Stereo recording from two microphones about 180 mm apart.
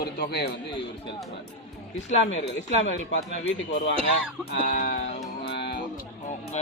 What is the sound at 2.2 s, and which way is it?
Speech, 90° left.